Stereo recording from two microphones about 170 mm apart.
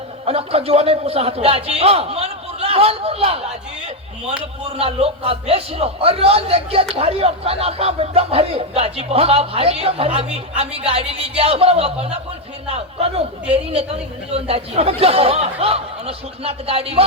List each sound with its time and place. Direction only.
0.3 s a man's voice: 35° right (ahead or behind)
4.8 s a man's voice: 35° right (ahead or behind)